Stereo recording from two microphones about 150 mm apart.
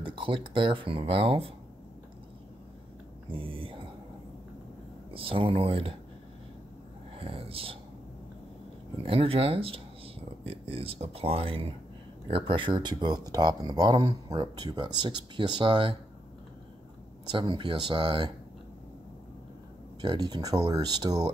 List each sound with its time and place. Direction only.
0.0 s speech: 35° right (ahead or behind)
3.3 s speech: 35° right (ahead or behind)
5.1 s speech: 35° right (ahead or behind)
7.2 s speech: 40° right (ahead or behind)
9.0 s speech: 40° right (ahead or behind)
17.3 s speech: 30° right (ahead or behind)
20.0 s speech: 30° right (ahead or behind)